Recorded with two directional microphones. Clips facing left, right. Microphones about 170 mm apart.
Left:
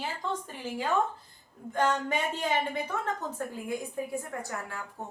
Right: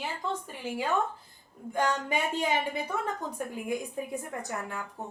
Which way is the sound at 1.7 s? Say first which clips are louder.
Left 1 dB; 10° right (ahead or behind).